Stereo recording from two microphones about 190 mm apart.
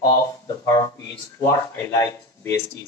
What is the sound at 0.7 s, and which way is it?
Speech, 15° left (ahead or behind).